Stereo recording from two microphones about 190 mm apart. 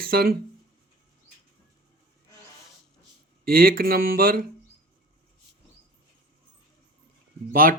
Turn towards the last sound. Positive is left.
turn(degrees=-50)  # may be behind; listen again after turning